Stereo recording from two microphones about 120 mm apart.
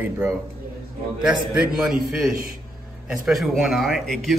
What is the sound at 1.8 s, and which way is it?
Speech, 5° right (ahead or behind).